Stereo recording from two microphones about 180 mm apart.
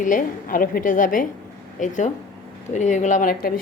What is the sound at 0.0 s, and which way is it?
A woman's voice, 45° left (ahead or behind).